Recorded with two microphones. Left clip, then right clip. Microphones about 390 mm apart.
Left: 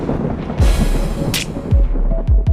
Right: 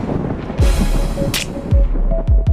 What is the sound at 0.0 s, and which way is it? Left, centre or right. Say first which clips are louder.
Music: left 1 dB; centre.